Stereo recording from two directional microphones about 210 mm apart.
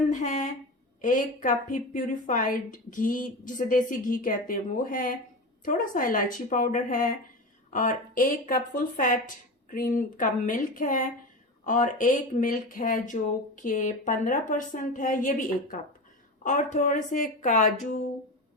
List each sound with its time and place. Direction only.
0.1 s a woman's voice: 35° left (ahead or behind)